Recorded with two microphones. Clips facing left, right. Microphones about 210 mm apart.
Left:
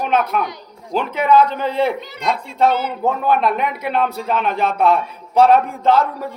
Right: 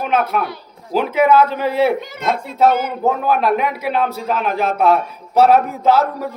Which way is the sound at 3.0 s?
5° right (ahead or behind).